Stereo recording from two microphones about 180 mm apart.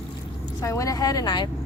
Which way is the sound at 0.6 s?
15° left (ahead or behind).